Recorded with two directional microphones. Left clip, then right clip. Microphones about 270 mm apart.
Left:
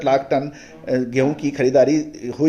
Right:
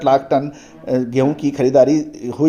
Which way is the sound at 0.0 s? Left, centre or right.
Centre.